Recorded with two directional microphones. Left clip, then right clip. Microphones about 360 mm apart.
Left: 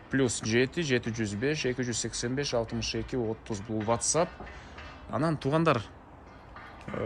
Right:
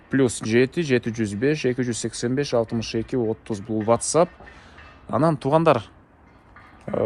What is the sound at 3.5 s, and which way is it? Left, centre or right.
Speech, right.